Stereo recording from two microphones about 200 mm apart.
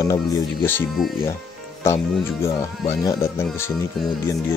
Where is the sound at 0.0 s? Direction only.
20° left (ahead or behind).